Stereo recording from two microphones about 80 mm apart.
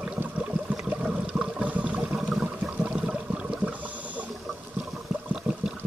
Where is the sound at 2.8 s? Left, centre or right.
Centre.